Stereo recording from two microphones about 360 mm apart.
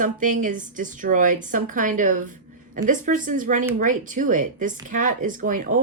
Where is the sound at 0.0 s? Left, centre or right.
Right.